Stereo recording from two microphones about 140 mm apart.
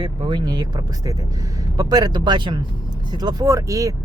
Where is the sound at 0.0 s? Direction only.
35° right (ahead or behind).